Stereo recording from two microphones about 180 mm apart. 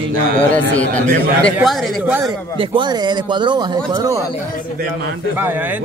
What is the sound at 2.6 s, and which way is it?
A man's voice, 25° right (ahead or behind).